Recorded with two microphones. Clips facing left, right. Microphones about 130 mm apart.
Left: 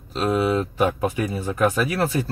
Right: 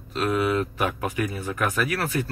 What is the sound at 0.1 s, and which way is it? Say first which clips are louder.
Speech: left 2 dB; 25° left (ahead or behind).